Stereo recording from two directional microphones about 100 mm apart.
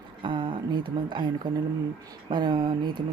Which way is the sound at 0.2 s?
55° right (ahead or behind).